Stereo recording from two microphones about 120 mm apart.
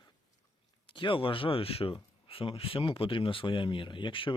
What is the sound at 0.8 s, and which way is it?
Speech, 45° left (ahead or behind).